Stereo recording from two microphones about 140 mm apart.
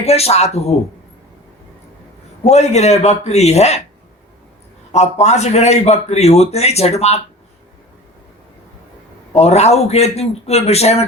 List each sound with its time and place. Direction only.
0.0 s a man's voice: 45° left (ahead or behind)
2.4 s a man's voice: 50° left (ahead or behind)
4.9 s a man's voice: 55° left (ahead or behind)
9.3 s a man's voice: 50° left (ahead or behind)